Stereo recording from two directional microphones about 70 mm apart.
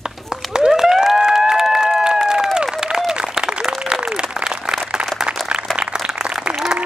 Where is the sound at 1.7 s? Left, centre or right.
Centre.